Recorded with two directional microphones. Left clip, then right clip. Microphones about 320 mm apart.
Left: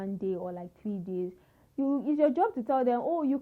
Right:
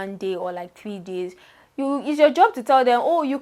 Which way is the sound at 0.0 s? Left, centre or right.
Centre.